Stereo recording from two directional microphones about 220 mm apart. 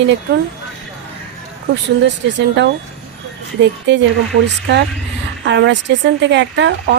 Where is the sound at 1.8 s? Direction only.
55° right (ahead or behind).